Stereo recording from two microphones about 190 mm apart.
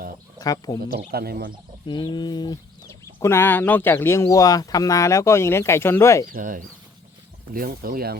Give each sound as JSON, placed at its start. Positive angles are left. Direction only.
{"t": 0.3, "sound": "speech", "side_deg": 20}
{"t": 0.9, "sound": "speech", "side_deg": -55}
{"t": 1.9, "sound": "speech", "side_deg": 25}
{"t": 6.3, "sound": "speech", "side_deg": -45}